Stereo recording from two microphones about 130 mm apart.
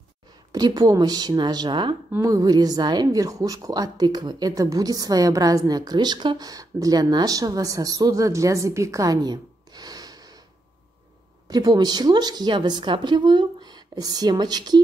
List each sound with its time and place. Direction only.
0.5 s a woman's voice: 30° right (ahead or behind)
2.1 s speech: 25° right (ahead or behind)
11.4 s a woman's voice: 30° right (ahead or behind)